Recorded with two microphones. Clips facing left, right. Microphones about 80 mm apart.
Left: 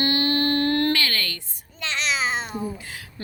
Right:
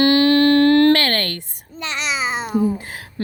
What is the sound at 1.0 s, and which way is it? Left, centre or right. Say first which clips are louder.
Speech: right 6 dB; right.